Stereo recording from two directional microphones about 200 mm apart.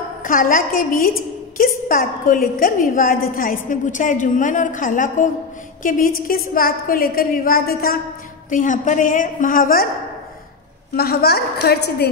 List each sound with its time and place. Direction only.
0.2 s a woman's voice: 45° left (ahead or behind)
11.0 s a woman's voice: 50° left (ahead or behind)